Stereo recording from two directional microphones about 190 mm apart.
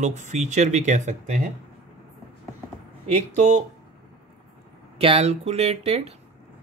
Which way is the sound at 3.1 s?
40° right (ahead or behind).